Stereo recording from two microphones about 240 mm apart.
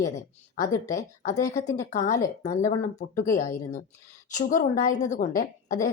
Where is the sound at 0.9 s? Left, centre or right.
Left.